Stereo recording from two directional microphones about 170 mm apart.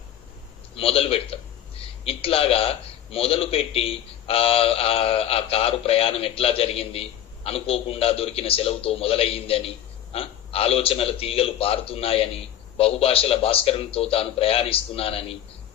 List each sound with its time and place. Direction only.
0.8 s a man's voice: 35° left (ahead or behind)